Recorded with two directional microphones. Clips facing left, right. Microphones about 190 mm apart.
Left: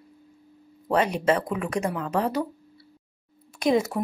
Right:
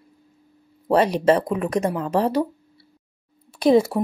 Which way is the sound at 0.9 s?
35° right (ahead or behind).